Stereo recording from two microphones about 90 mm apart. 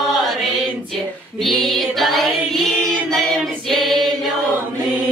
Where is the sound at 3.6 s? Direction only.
Centre (ahead or behind).